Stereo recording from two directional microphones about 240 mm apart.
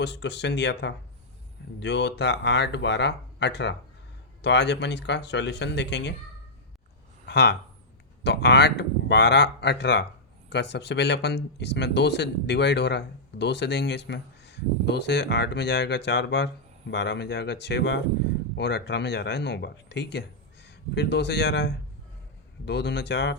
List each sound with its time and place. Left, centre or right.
0.0 s speech: left
7.3 s speech: left